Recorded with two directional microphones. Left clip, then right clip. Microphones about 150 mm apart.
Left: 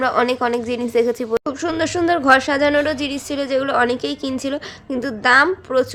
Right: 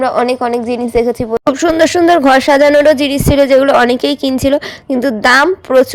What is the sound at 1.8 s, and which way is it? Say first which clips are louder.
A woman's voice: right 9 dB; 50° right (ahead or behind).